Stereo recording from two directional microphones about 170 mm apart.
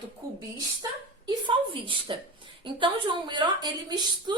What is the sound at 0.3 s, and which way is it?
A woman's voice, 25° right (ahead or behind).